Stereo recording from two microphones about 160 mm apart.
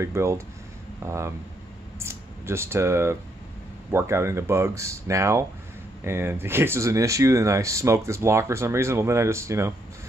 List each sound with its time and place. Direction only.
0.0 s speech: 15° right (ahead or behind)
2.0 s a sound: 15° right (ahead or behind)
3.9 s speech: 15° right (ahead or behind)